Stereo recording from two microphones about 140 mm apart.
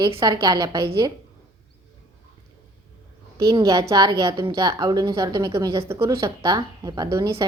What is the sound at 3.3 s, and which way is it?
A woman's voice, 25° right (ahead or behind).